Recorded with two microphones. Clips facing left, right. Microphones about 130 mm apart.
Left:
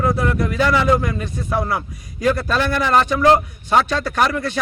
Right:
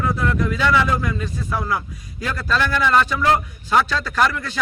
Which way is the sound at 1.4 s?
30° left (ahead or behind).